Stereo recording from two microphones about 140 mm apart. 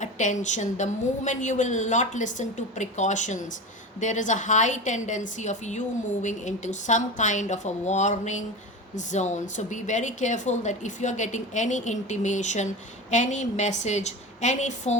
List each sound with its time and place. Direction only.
0.0 s a woman's voice: 60° left (ahead or behind)